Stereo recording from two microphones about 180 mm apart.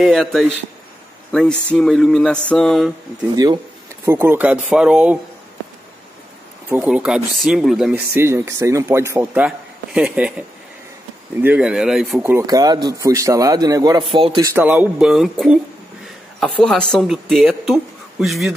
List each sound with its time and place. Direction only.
0.0 s speech: centre (ahead or behind)
4.0 s speech: 15° right (ahead or behind)
6.7 s speech: 5° right (ahead or behind)
8.1 s speech: 15° right (ahead or behind)
11.4 s speech: 5° right (ahead or behind)
12.4 s a man's voice: 20° right (ahead or behind)
14.5 s speech: 10° right (ahead or behind)